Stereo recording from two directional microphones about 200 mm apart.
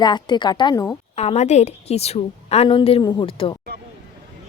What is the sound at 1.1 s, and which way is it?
A woman's voice, 35° left (ahead or behind).